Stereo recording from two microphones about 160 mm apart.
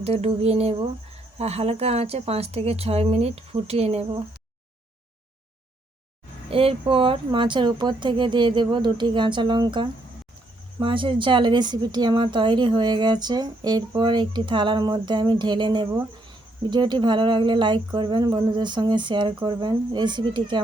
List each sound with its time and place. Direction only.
0.0 s a woman's voice: 40° right (ahead or behind)
6.5 s speech: 35° right (ahead or behind)